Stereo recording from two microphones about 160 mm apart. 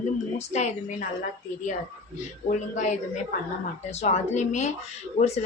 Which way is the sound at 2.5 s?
50° left (ahead or behind).